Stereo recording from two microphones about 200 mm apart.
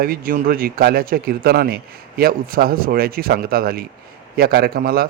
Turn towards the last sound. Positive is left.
turn(degrees=-50)  # may be behind; listen again after turning